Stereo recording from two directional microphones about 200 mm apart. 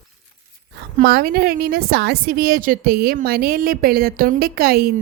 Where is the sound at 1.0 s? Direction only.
50° right (ahead or behind).